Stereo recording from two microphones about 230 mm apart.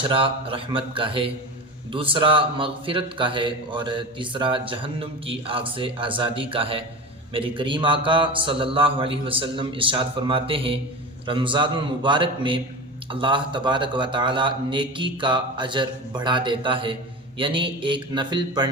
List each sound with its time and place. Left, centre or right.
0.0 s a man's voice: right